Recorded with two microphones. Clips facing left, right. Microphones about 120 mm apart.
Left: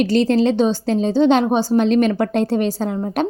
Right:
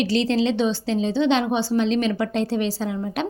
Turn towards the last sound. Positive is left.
turn(degrees=45)  # may be behind; listen again after turning